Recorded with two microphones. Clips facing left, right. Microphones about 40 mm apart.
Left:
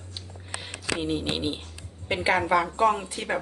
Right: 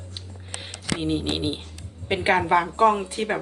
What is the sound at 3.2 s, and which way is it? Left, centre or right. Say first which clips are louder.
Speech: right 5 dB; centre.